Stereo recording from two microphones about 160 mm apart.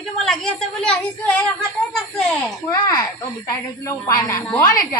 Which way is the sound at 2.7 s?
20° left (ahead or behind).